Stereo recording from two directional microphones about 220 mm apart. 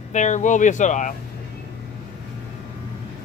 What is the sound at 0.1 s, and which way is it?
Speech, 35° left (ahead or behind).